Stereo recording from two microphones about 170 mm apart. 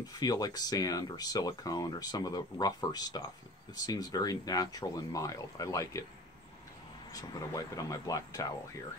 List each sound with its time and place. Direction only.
0.0 s speech: 20° left (ahead or behind)
7.1 s speech: 20° left (ahead or behind)